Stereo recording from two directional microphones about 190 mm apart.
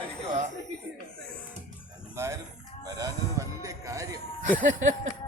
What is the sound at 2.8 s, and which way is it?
Music, 20° right (ahead or behind).